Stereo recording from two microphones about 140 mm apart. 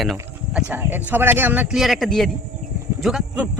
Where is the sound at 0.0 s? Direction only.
5° right (ahead or behind).